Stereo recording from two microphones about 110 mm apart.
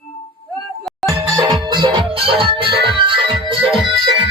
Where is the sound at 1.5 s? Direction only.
45° right (ahead or behind).